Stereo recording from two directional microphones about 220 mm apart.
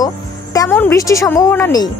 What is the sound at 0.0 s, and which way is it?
Speech, 15° left (ahead or behind).